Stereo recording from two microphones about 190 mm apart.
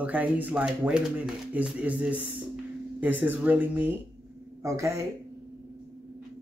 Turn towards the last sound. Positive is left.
turn(degrees=-15)  # may be behind; listen again after turning